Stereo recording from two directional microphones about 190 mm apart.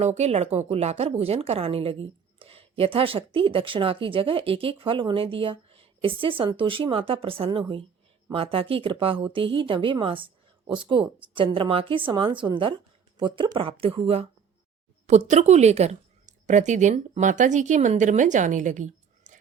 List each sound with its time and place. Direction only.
0.0 s a woman's voice: 35° right (ahead or behind)
15.3 s speech: 35° right (ahead or behind)